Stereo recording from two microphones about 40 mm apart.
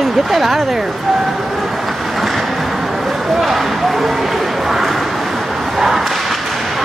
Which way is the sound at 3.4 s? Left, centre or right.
Centre.